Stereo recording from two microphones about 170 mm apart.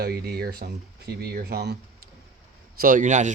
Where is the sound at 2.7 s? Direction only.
55° right (ahead or behind).